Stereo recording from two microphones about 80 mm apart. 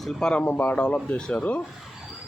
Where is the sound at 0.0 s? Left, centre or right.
Centre.